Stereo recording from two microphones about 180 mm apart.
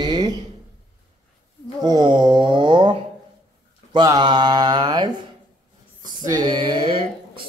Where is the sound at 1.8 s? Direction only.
25° right (ahead or behind).